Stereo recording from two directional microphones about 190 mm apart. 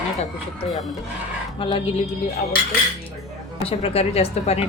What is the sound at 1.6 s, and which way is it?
Speech, 25° left (ahead or behind).